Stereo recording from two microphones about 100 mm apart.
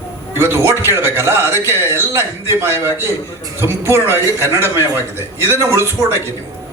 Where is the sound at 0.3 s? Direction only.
25° right (ahead or behind).